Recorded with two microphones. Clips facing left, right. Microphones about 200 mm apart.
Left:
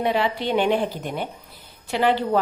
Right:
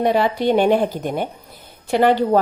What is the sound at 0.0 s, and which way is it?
A woman's voice, 45° right (ahead or behind).